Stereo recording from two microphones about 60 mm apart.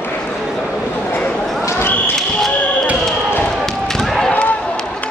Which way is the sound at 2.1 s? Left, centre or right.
Centre.